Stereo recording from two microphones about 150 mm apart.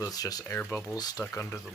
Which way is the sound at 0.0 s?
25° left (ahead or behind).